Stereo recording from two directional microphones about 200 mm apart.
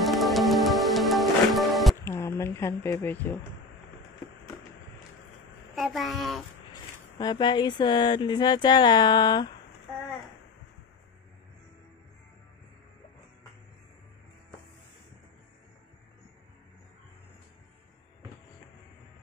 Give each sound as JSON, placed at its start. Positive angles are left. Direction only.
{"t": 0.0, "sound": "music", "side_deg": 0}
{"t": 2.0, "sound": "a sound", "side_deg": 15}
{"t": 5.8, "sound": "a child's voice", "side_deg": 0}
{"t": 6.7, "sound": "speech", "side_deg": 20}